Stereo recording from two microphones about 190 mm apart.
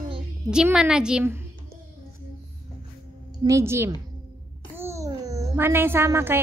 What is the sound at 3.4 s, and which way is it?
Speech, 15° right (ahead or behind).